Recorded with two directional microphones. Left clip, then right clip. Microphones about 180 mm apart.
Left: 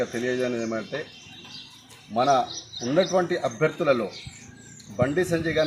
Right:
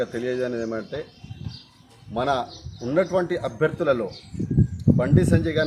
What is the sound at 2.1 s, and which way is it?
A man's voice, 20° right (ahead or behind).